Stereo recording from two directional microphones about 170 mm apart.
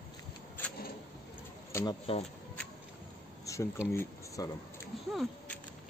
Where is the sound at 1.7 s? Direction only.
15° left (ahead or behind).